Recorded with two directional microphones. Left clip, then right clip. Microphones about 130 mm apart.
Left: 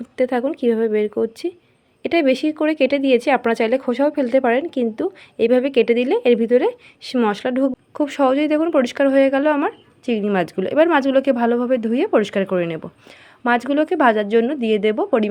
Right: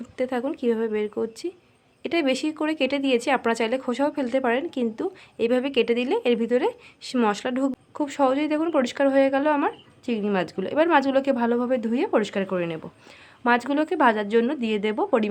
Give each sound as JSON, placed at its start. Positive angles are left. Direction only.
{"t": 0.2, "sound": "a woman's voice", "side_deg": 35}